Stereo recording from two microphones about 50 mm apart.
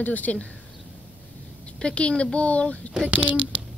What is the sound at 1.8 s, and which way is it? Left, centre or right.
Speech, centre.